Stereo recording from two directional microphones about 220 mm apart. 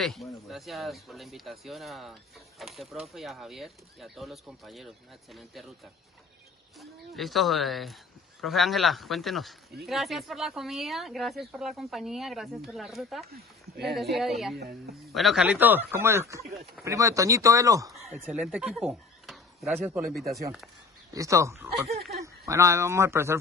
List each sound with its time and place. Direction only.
0.0 s speech: centre (ahead or behind)
6.8 s speech: centre (ahead or behind)
14.6 s a man's voice: 45° right (ahead or behind)
15.0 s speech: centre (ahead or behind)
21.1 s speech: 15° right (ahead or behind)